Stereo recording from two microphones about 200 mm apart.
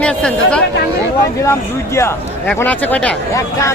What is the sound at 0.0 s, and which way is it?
Speech, 5° left (ahead or behind).